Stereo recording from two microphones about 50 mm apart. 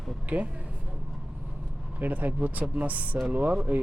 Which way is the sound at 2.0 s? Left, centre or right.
Right.